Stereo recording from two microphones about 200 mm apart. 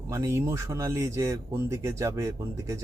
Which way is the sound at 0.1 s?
15° right (ahead or behind).